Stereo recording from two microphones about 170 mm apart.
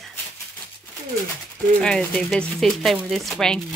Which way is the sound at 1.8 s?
5° left (ahead or behind).